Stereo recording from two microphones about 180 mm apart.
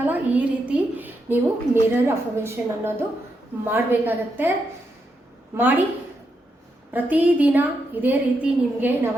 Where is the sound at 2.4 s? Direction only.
15° right (ahead or behind).